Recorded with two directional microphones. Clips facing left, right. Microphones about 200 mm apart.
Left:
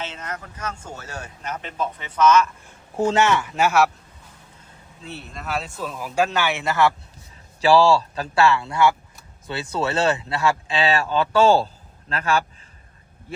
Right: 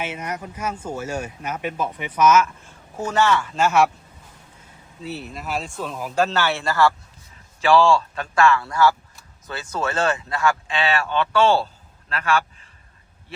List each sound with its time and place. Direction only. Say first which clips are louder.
0.0 s speech: right 4 dB; 10° right (ahead or behind)
3.0 s speech: left 1 dB; 25° left (ahead or behind)
3.7 s speech: right 1 dB; 5° left (ahead or behind)
5.0 s speech: right 2 dB; centre (ahead or behind)
6.1 s a man's voice: even; 15° left (ahead or behind)
7.8 s speech: left 1 dB; 40° left (ahead or behind)
8.6 s speech: even; 25° left (ahead or behind)